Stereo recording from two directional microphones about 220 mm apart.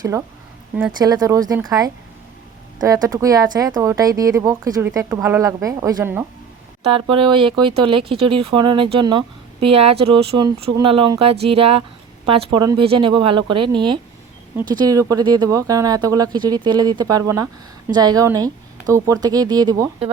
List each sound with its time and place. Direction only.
0.0 s speech: 15° right (ahead or behind)
6.8 s speech: 25° right (ahead or behind)